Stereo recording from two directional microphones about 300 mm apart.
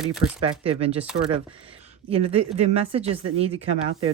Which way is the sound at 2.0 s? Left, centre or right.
Centre.